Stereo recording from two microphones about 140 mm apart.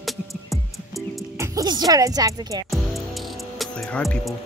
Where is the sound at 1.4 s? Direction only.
30° right (ahead or behind).